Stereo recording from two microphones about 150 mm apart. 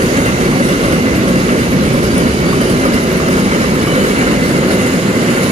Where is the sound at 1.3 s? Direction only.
50° right (ahead or behind).